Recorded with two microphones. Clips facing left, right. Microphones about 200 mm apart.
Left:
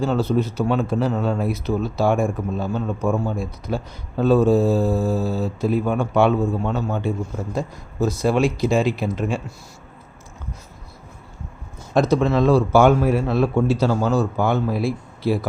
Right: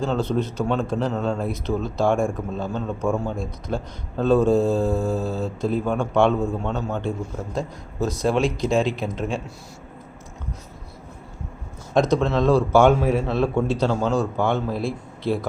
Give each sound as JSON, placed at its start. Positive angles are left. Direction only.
{"t": 0.0, "sound": "a man's voice", "side_deg": 5}
{"t": 11.9, "sound": "a man's voice", "side_deg": 5}